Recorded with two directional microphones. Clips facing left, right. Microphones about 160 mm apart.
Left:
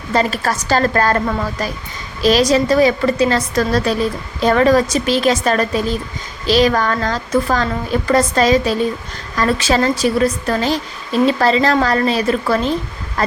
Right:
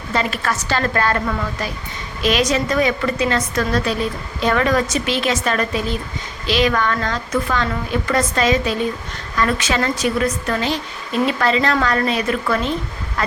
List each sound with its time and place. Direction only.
0.1 s a woman's voice: 40° left (ahead or behind)
2.2 s a woman's voice: 35° left (ahead or behind)